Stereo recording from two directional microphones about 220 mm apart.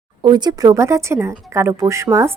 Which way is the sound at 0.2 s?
20° right (ahead or behind).